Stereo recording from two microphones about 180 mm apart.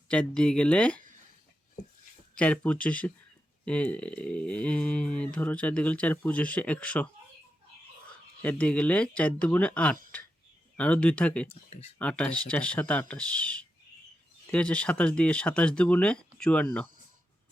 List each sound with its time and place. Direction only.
0.1 s speech: 5° left (ahead or behind)
2.4 s speech: 5° left (ahead or behind)
8.4 s speech: 10° left (ahead or behind)
11.4 s speech: 35° left (ahead or behind)
11.9 s speech: 5° left (ahead or behind)